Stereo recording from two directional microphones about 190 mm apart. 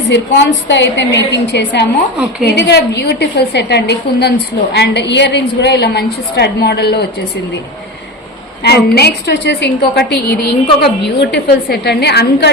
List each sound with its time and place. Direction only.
0.7 s a woman's voice: 70° left (ahead or behind)
8.6 s a woman's voice: 55° left (ahead or behind)